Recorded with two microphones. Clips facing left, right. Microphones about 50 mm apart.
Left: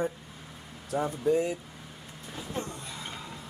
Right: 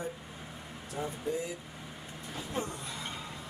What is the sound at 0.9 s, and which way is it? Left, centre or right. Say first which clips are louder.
Speech: left 9 dB; left.